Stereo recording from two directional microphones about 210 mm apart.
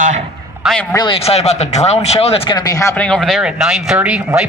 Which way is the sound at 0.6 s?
Centre (ahead or behind).